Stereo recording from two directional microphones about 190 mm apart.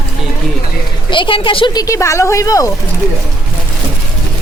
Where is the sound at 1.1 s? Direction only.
25° left (ahead or behind).